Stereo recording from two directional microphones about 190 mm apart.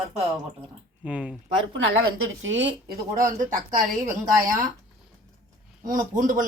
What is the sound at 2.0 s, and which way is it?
Speech, 90° right.